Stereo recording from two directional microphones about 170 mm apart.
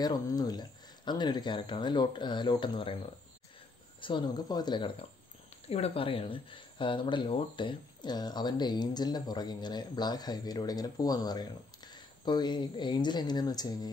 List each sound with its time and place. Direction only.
0.0 s speech: 25° left (ahead or behind)
4.0 s speech: 25° left (ahead or behind)